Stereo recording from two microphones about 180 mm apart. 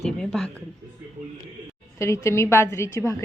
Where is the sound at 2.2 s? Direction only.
15° left (ahead or behind).